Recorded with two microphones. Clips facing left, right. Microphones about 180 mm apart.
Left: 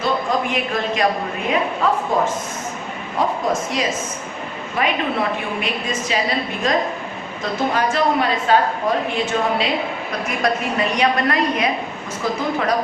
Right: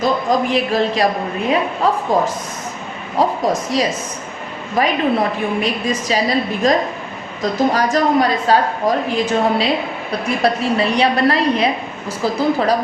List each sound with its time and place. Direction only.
0.0 s a woman's voice: 35° right (ahead or behind)